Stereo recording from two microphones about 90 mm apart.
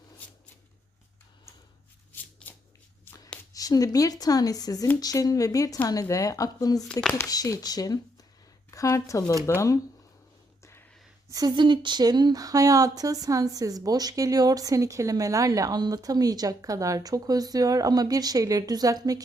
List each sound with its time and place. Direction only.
2.4 s shuffling cards: 10° left (ahead or behind)
3.5 s speech: 40° left (ahead or behind)
10.6 s a sound: 30° left (ahead or behind)
11.3 s speech: 45° right (ahead or behind)
11.5 s speech: 60° right (ahead or behind); by 19.2 s 40° right (ahead or behind)